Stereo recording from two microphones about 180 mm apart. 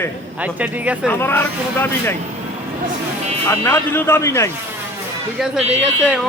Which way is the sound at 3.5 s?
15° left (ahead or behind).